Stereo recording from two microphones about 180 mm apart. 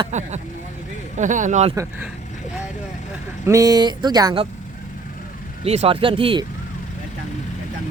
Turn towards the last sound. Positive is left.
turn(degrees=-30)  # may be behind; listen again after turning